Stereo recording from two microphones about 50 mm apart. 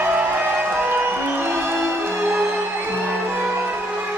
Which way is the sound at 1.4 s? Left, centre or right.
Right.